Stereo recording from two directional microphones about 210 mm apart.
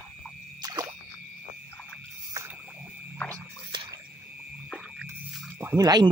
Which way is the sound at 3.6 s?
20° right (ahead or behind).